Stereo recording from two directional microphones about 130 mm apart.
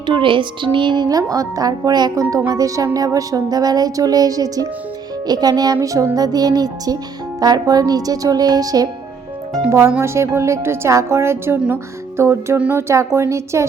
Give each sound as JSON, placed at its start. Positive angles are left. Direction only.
{"t": 0.0, "sound": "a woman's voice", "side_deg": -40}